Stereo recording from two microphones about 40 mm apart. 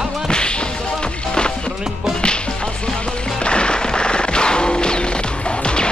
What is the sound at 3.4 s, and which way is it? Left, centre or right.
Music, left.